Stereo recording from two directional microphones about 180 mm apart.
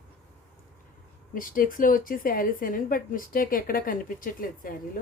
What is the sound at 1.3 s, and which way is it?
Speech, 50° left (ahead or behind).